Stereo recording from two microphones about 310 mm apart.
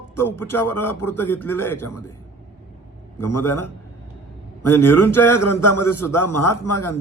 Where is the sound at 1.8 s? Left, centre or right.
Left.